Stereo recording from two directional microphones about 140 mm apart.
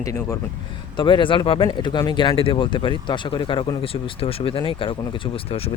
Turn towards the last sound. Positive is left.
turn(degrees=45)  # may be behind; listen again after turning